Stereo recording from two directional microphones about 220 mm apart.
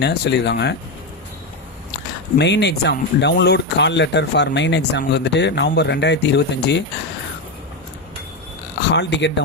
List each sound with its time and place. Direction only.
0.0 s speech: 50° left (ahead or behind)
2.3 s speech: 50° left (ahead or behind)
8.9 s speech: 50° left (ahead or behind)